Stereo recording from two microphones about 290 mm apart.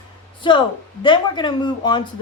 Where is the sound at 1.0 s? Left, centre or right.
Centre.